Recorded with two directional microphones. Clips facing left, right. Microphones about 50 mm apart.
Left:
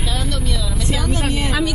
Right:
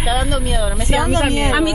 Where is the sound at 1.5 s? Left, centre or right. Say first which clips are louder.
Right 4 dB; right.